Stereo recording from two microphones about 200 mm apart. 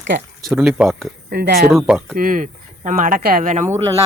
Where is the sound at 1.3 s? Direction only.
50° right (ahead or behind).